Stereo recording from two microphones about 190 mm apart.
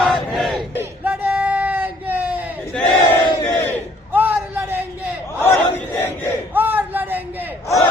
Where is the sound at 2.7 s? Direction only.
5° left (ahead or behind).